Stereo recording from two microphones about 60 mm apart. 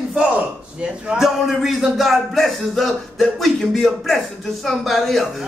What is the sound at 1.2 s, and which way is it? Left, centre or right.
A man's voice, centre.